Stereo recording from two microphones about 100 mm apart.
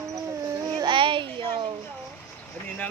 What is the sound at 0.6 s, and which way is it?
A child's voice, 45° right (ahead or behind).